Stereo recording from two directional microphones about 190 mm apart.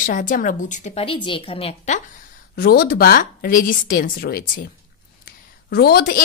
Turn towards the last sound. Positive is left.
turn(degrees=55)  # may be behind; listen again after turning